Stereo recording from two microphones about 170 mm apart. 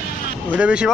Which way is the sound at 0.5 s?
5° right (ahead or behind).